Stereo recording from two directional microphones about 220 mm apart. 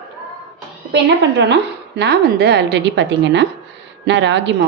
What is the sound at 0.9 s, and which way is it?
A woman's voice, 50° right (ahead or behind).